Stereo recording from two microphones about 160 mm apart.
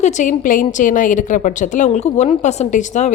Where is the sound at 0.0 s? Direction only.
50° left (ahead or behind).